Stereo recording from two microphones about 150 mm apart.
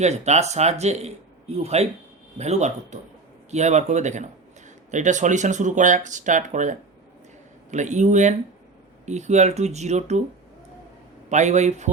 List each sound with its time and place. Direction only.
0.0 s speech: 50° right (ahead or behind)
11.3 s speech: 50° right (ahead or behind)